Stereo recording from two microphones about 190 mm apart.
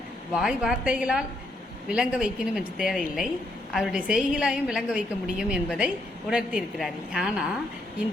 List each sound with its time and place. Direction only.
0.3 s a woman's voice: 5° right (ahead or behind)